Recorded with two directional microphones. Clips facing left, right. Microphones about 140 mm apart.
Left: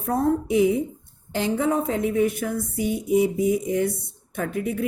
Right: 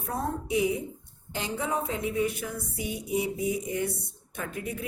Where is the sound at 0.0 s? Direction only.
55° left (ahead or behind).